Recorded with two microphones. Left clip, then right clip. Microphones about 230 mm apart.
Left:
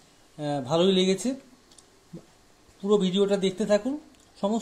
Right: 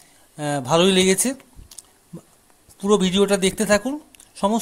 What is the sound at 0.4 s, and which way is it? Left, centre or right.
Speech, right.